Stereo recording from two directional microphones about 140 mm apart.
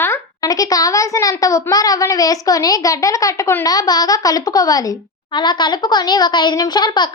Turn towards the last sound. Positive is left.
turn(degrees=35)  # may be behind; listen again after turning